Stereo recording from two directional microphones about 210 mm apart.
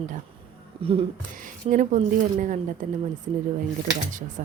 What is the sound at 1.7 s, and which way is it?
Speech, 35° right (ahead or behind).